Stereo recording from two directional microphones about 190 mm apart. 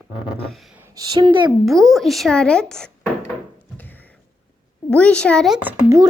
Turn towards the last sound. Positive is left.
turn(degrees=-15)  # may be behind; listen again after turning